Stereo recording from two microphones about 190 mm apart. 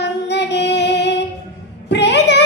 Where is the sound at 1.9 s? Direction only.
65° left (ahead or behind).